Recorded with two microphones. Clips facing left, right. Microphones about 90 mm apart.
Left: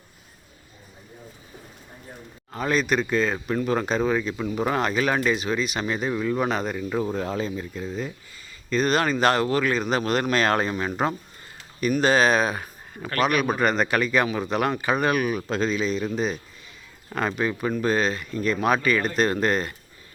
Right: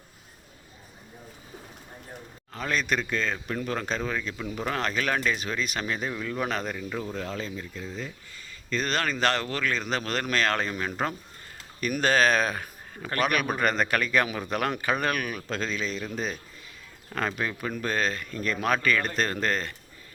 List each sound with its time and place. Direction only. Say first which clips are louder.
2.5 s speech: left 5 dB; 10° left (ahead or behind)
6.9 s speech: left 9 dB; 25° left (ahead or behind)
8.7 s speech: left 6 dB; 10° left (ahead or behind)
11.9 s a man's voice: left 3 dB; 5° left (ahead or behind)